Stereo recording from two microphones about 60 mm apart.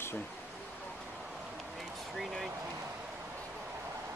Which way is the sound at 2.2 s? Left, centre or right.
Centre.